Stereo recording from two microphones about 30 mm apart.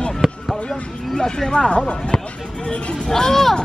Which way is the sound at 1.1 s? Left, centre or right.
Left.